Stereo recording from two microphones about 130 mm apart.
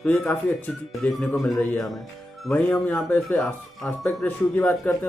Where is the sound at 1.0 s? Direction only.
10° left (ahead or behind).